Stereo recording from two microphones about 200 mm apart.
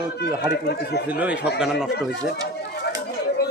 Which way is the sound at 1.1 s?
5° right (ahead or behind).